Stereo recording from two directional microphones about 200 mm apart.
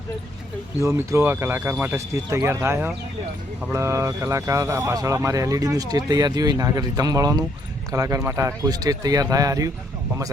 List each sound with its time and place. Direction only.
0.8 s speech: 15° right (ahead or behind)